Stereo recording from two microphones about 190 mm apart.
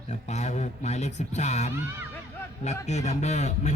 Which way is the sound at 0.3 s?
35° left (ahead or behind).